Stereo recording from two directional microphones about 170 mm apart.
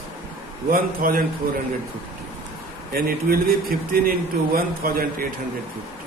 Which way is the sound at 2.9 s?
60° right (ahead or behind).